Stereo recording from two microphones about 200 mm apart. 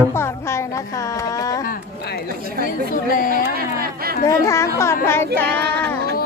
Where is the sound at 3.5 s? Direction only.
50° right (ahead or behind).